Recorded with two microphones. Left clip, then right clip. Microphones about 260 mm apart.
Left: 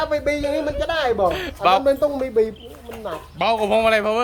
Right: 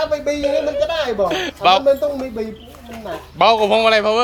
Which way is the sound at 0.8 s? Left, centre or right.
Centre.